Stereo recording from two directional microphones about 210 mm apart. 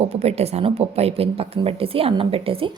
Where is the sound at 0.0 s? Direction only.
30° right (ahead or behind).